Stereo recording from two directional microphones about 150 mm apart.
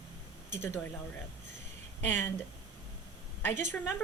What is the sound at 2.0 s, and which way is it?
Speech, 15° left (ahead or behind).